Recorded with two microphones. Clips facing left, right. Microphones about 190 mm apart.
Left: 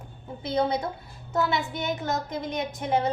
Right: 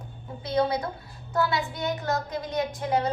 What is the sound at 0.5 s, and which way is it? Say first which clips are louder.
A woman's voice: right 1 dB; 25° left (ahead or behind).